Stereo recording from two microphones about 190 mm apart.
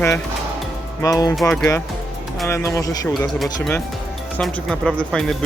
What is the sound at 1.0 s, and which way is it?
Speech, 20° left (ahead or behind).